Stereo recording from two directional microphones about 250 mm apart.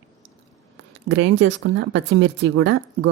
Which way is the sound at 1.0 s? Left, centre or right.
Right.